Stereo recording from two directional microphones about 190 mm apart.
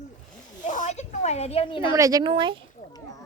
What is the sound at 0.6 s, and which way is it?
A woman's voice, 40° left (ahead or behind).